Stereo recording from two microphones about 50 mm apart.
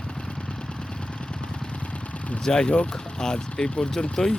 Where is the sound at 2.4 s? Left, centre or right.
Centre.